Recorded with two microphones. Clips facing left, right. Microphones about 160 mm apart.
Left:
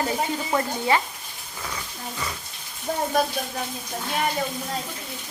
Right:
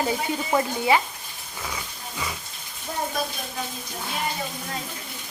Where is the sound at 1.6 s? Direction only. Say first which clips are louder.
Left 1 dB; 5° right (ahead or behind).